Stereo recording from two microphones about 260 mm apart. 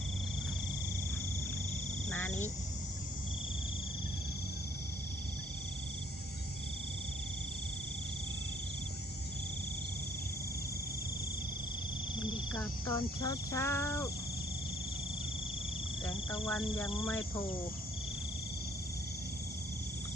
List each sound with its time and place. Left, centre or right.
12.5 s speech: centre
16.0 s speech: centre